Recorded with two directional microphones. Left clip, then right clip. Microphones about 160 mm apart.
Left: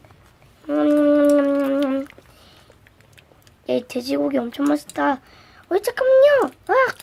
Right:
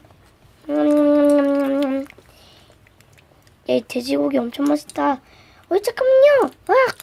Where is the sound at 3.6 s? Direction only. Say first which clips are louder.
Right 2 dB; 10° right (ahead or behind).